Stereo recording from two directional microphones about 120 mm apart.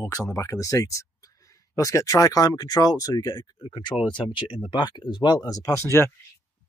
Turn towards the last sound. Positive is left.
turn(degrees=20)  # may be behind; listen again after turning